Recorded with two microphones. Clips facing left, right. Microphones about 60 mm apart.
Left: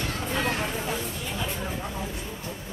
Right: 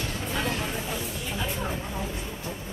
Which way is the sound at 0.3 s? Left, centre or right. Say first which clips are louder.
Left 2 dB; left.